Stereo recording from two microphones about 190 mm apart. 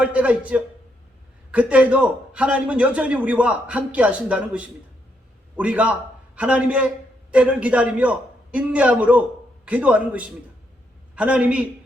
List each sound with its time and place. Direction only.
0.0 s a man's voice: 5° right (ahead or behind)